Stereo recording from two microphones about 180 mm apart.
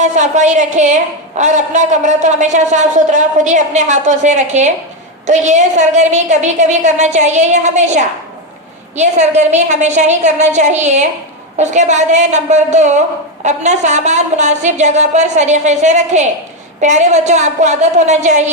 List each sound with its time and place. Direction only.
0.0 s a woman's voice: 40° right (ahead or behind)